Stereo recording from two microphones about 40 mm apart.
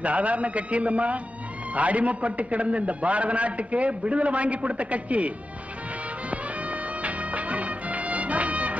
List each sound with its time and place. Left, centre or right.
0.0 s a man's voice: right
6.3 s music: right